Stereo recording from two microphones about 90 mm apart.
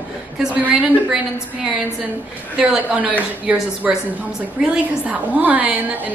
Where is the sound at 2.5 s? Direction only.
10° right (ahead or behind).